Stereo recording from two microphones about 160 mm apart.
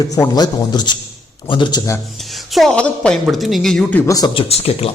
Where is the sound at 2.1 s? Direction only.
Centre (ahead or behind).